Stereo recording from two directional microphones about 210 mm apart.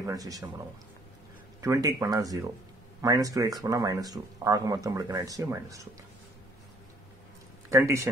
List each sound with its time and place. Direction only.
0.0 s speech: 15° right (ahead or behind)
1.6 s speech: 15° right (ahead or behind)
7.7 s speech: 15° right (ahead or behind)